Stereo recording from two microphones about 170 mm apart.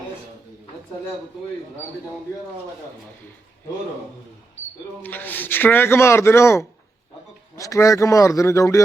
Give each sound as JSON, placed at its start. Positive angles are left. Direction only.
{"t": 5.0, "sound": "a man's voice", "side_deg": 10}